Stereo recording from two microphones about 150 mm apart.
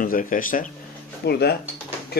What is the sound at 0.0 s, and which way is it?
Speech, 65° left (ahead or behind).